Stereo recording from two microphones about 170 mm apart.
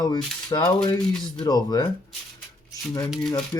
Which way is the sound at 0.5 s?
25° left (ahead or behind).